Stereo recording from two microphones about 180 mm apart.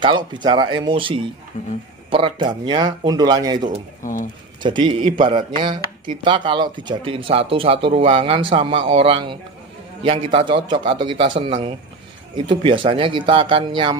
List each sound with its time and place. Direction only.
0.0 s speech: 25° right (ahead or behind)
4.0 s speech: 45° left (ahead or behind)
4.6 s speech: 25° right (ahead or behind)